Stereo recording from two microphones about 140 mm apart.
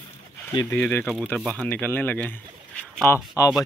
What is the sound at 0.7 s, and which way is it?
Speech, 15° left (ahead or behind).